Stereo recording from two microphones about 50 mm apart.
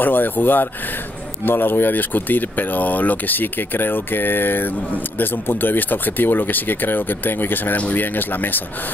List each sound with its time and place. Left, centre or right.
0.0 s speech: left